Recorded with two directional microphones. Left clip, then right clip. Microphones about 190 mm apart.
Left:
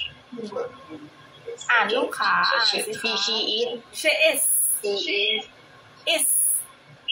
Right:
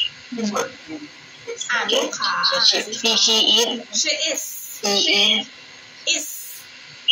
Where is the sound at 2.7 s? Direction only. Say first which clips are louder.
Right 6 dB; 25° right (ahead or behind).